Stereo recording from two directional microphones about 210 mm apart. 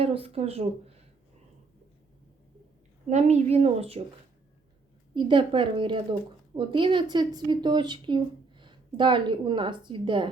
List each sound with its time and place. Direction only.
0.0 s a woman's voice: 25° right (ahead or behind)
3.1 s speech: 35° right (ahead or behind)
5.1 s a woman's voice: 20° right (ahead or behind)